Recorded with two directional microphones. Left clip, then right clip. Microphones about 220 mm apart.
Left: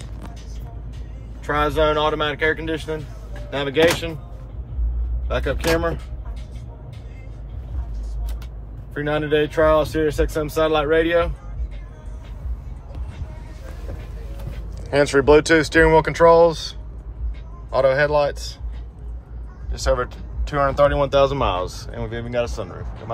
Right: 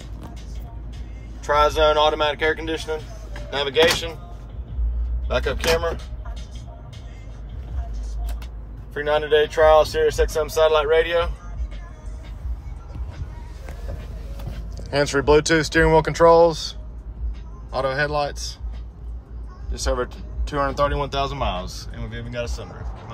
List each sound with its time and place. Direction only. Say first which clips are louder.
1.4 s speech: right 2 dB; 25° right (ahead or behind)
5.3 s speech: even; 25° right (ahead or behind)
8.9 s speech: right 2 dB; 35° right (ahead or behind)
14.8 s speech: left 4 dB; 10° right (ahead or behind)
19.7 s speech: left 4 dB; 5° right (ahead or behind)